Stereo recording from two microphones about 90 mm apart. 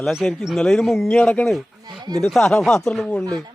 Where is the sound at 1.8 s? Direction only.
50° right (ahead or behind).